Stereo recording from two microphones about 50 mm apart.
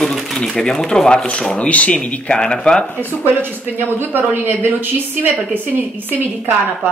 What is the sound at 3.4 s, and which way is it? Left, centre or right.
Speech, right.